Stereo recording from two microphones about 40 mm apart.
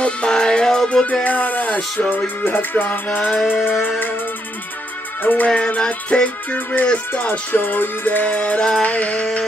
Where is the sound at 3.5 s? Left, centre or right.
Left.